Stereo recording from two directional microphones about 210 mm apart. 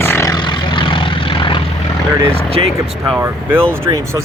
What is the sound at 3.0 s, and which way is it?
Speech, 10° right (ahead or behind).